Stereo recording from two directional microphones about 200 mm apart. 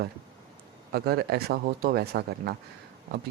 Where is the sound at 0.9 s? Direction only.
50° right (ahead or behind).